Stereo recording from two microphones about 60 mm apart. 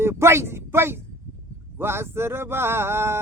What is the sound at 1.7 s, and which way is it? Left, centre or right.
Speech, right.